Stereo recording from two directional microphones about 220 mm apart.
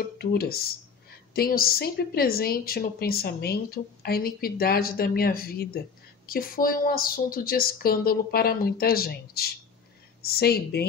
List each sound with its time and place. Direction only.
0.2 s a woman's voice: 45° left (ahead or behind)